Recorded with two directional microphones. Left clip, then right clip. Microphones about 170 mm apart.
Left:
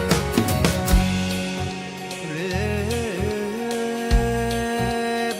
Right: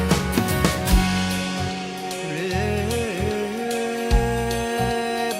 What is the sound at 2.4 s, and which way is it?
Music, centre (ahead or behind).